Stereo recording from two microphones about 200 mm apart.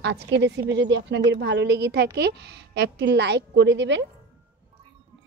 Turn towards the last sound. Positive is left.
turn(degrees=-65)  # may be behind; listen again after turning